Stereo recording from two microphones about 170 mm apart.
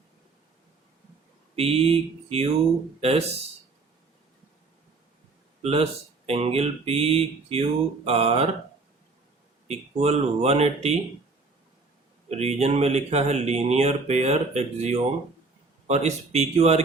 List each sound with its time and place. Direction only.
1.5 s speech: 35° right (ahead or behind)
5.6 s speech: 35° right (ahead or behind)
9.6 s speech: 40° right (ahead or behind)
12.3 s speech: 40° right (ahead or behind)